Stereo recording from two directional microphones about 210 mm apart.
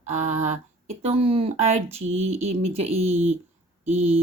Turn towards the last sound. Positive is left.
turn(degrees=-30)  # may be behind; listen again after turning